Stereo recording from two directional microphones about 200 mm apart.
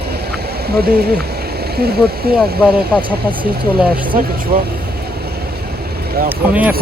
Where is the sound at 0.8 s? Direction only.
50° right (ahead or behind).